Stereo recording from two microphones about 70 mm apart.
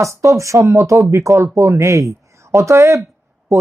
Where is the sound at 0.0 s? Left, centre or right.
Right.